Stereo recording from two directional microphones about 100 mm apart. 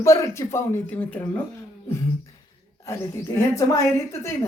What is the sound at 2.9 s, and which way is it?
A woman's voice, 30° left (ahead or behind).